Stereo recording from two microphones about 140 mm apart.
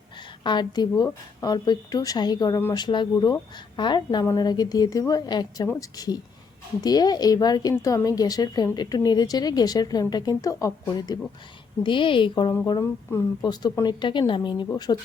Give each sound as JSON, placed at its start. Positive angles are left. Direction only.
{"t": 0.4, "sound": "a woman's voice", "side_deg": 30}
{"t": 5.6, "sound": "speech", "side_deg": 15}
{"t": 6.8, "sound": "a woman's voice", "side_deg": 30}
{"t": 12.8, "sound": "a woman's voice", "side_deg": 20}